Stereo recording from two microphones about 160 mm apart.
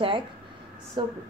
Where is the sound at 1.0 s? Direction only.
30° right (ahead or behind).